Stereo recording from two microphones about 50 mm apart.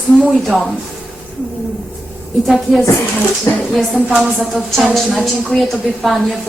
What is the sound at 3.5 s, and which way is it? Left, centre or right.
Speech, left.